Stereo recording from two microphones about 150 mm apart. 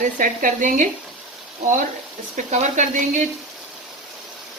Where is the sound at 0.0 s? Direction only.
60° right (ahead or behind).